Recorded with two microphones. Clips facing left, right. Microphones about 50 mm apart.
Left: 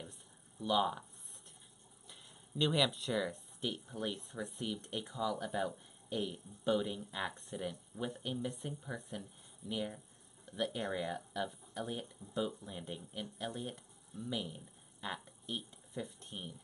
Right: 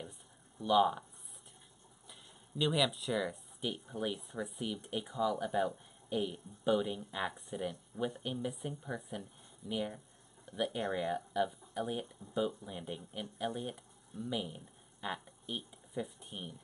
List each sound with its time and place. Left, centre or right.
0.6 s speech: centre
2.0 s speech: centre